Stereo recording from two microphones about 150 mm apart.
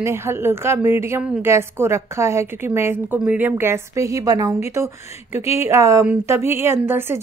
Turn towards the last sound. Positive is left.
turn(degrees=-15)  # may be behind; listen again after turning